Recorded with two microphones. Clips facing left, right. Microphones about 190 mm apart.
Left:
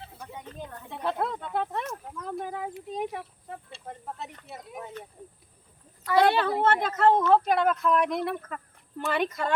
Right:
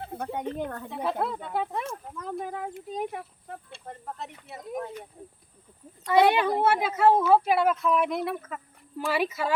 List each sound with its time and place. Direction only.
0.0 s speech: 55° right (ahead or behind)
1.2 s speech: 5° right (ahead or behind)
6.2 s a woman's voice: 15° right (ahead or behind)